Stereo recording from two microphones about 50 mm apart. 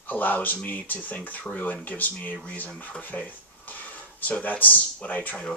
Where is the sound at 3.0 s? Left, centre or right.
Left.